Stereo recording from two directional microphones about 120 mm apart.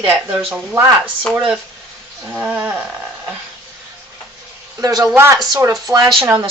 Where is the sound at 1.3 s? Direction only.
10° right (ahead or behind).